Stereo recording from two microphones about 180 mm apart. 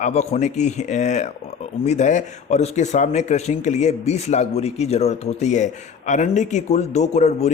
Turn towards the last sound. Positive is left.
turn(degrees=40)  # may be behind; listen again after turning